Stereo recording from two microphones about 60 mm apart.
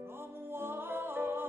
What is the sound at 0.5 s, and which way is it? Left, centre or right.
Music, right.